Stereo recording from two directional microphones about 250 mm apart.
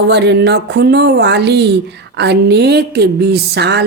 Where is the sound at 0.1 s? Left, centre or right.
Right.